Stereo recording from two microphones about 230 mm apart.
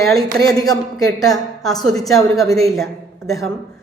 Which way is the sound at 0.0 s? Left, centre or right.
Centre.